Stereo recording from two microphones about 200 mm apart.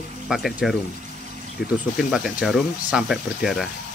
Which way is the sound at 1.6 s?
55° left (ahead or behind).